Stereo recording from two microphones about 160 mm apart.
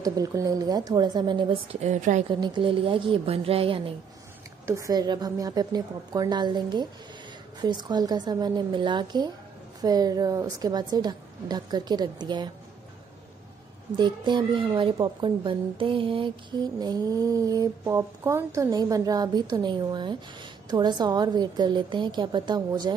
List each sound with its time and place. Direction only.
0.0 s speech: 25° right (ahead or behind); by 2.2 s 50° right (ahead or behind)
2.2 s a woman's voice: 30° right (ahead or behind)
4.6 s speech: 20° right (ahead or behind)
13.9 s speech: 30° right (ahead or behind)